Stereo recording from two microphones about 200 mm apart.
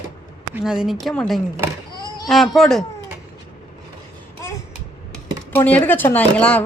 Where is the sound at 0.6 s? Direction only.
5° right (ahead or behind).